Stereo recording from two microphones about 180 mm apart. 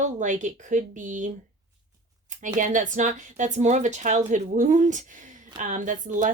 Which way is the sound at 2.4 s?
45° right (ahead or behind).